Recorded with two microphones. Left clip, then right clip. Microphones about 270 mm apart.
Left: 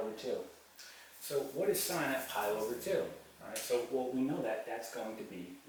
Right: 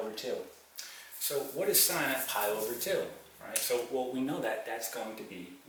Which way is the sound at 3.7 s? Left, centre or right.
Centre.